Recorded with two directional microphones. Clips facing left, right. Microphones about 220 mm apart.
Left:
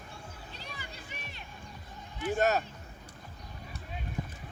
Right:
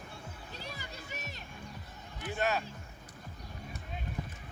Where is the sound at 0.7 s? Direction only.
40° right (ahead or behind).